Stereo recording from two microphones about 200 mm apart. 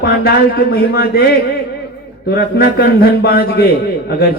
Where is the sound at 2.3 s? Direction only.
50° left (ahead or behind).